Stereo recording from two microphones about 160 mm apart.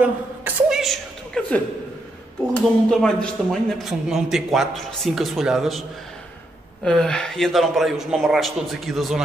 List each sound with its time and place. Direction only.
0.0 s a woman's voice: 10° right (ahead or behind)